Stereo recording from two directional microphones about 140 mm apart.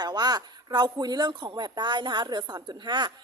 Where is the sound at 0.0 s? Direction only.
30° right (ahead or behind).